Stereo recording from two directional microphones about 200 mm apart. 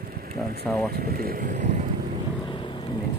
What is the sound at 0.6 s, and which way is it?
Speech, 5° left (ahead or behind).